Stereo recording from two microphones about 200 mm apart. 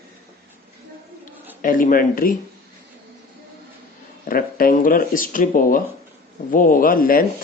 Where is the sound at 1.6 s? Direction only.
45° left (ahead or behind).